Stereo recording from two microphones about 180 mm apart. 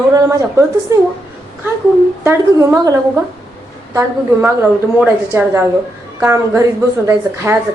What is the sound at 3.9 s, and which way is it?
A woman's voice, 15° right (ahead or behind).